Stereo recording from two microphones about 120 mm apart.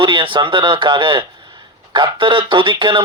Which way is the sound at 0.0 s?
45° right (ahead or behind).